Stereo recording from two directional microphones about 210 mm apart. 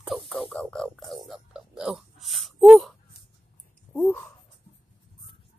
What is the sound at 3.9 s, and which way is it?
Speech, 10° left (ahead or behind).